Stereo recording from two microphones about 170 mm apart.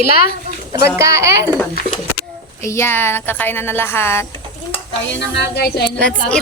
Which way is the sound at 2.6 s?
15° left (ahead or behind).